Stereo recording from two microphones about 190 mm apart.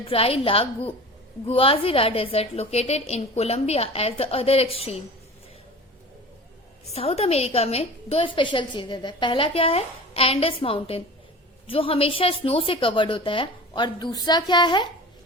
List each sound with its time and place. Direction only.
0.1 s a woman's voice: 30° left (ahead or behind)
6.9 s a woman's voice: 30° left (ahead or behind)